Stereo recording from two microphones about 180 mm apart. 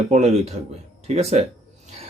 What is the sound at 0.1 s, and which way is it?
Speech, 35° right (ahead or behind).